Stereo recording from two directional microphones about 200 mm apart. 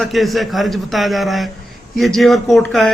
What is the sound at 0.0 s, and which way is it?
A man's voice, centre (ahead or behind).